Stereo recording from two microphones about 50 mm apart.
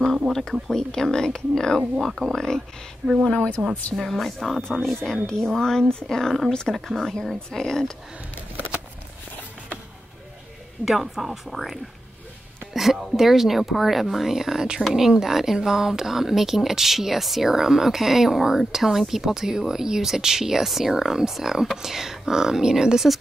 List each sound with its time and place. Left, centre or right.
0.3 s speech: centre
3.6 s a woman's voice: right
4.0 s speech: centre
10.9 s speech: centre